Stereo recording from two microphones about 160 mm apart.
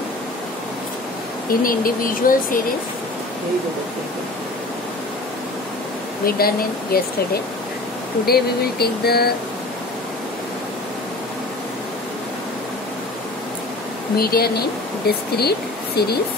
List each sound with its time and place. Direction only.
1.5 s speech: 65° left (ahead or behind)
6.2 s speech: 70° left (ahead or behind)
8.3 s speech: 80° left
14.1 s speech: 70° left (ahead or behind)